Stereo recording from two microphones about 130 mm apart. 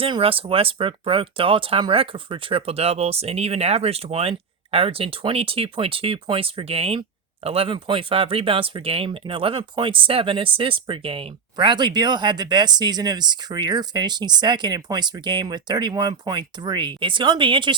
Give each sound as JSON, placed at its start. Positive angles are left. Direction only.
{"t": 0.0, "sound": "speech", "side_deg": -45}
{"t": 11.5, "sound": "speech", "side_deg": -35}